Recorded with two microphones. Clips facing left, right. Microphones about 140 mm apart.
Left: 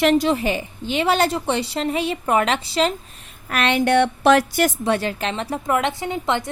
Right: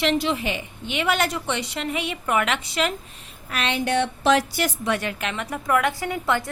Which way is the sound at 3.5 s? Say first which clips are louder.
Left 6 dB; 60° left (ahead or behind).